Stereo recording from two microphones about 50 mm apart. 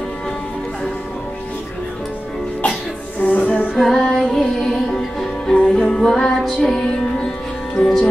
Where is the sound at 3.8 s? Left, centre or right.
Centre.